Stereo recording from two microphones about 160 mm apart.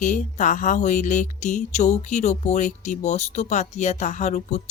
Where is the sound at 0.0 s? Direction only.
50° left (ahead or behind).